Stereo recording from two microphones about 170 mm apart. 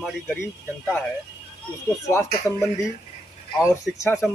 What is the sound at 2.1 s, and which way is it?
Speech, 15° left (ahead or behind).